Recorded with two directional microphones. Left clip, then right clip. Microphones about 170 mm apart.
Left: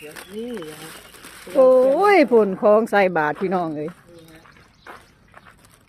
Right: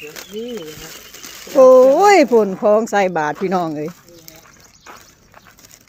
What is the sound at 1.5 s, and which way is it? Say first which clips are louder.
Speech: right 6 dB; 30° right (ahead or behind).